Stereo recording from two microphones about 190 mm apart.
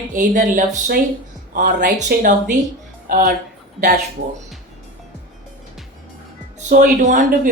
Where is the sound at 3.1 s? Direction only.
50° right (ahead or behind).